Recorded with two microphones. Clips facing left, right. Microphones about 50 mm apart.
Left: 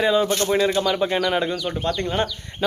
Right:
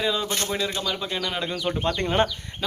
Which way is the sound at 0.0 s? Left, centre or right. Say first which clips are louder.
Left 7 dB; centre.